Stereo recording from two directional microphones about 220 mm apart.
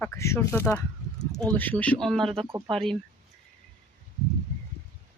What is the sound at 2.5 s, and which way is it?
Speech, 20° right (ahead or behind).